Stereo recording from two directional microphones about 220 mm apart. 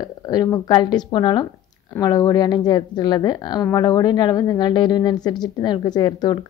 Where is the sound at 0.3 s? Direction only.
15° left (ahead or behind).